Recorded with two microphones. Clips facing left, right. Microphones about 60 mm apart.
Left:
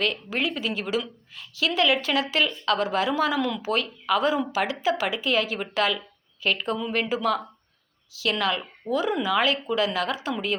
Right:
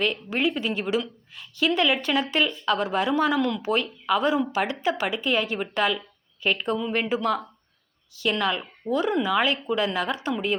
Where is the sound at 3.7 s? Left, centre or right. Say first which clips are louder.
Right 1 dB; centre.